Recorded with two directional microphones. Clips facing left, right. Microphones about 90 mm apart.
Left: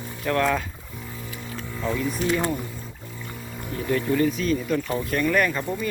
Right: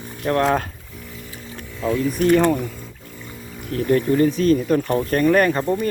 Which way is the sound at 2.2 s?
60° right (ahead or behind).